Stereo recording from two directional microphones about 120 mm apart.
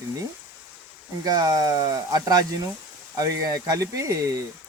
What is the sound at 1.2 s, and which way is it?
Speech, 35° right (ahead or behind).